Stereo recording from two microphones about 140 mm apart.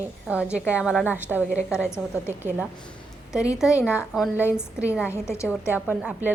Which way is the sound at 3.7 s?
20° left (ahead or behind).